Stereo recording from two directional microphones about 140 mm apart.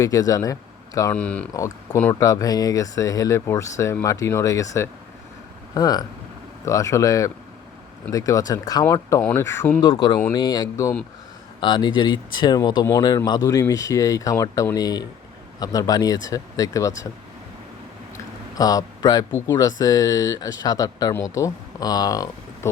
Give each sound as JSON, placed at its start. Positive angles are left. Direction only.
{"t": 0.0, "sound": "speech", "side_deg": 25}
{"t": 1.1, "sound": "speech", "side_deg": 10}
{"t": 1.5, "sound": "speech", "side_deg": 25}
{"t": 10.3, "sound": "speech", "side_deg": 30}
{"t": 18.5, "sound": "speech", "side_deg": 25}